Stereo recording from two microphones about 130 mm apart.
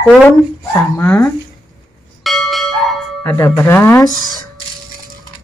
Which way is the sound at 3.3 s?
20° left (ahead or behind).